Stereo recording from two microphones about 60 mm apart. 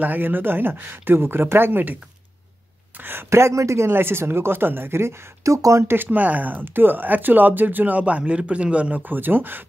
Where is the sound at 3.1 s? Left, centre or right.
Right.